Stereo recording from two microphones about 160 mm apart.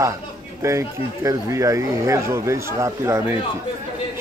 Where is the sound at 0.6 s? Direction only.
20° right (ahead or behind).